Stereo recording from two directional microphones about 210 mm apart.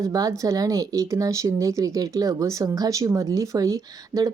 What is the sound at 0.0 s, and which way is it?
Speech, 15° right (ahead or behind).